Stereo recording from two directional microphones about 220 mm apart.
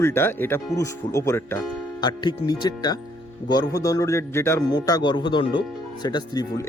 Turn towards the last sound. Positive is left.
turn(degrees=20)  # may be behind; listen again after turning